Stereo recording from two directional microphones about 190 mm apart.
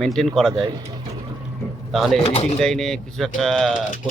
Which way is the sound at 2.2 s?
30° left (ahead or behind).